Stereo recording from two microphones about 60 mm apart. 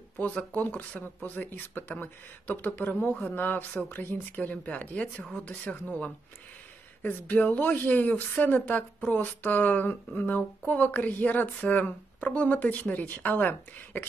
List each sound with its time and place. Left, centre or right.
0.2 s speech: left